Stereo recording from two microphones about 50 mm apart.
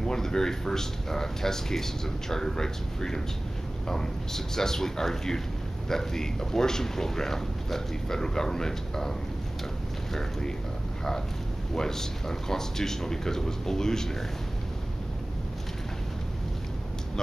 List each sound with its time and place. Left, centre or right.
0.0 s speech: centre
11.7 s speech: centre